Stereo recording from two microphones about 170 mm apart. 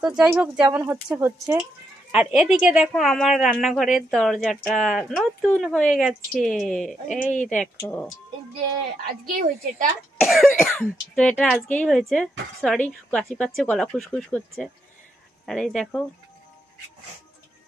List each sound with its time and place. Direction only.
0.0 s speech: 5° right (ahead or behind)
2.1 s speech: 5° right (ahead or behind)
7.2 s speech: 50° left (ahead or behind)
7.6 s speech: 10° left (ahead or behind)
9.3 s a woman's voice: 50° right (ahead or behind)
10.2 s speech: centre (ahead or behind)